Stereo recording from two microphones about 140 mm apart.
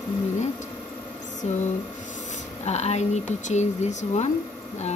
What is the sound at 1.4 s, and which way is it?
Speech, 50° left (ahead or behind).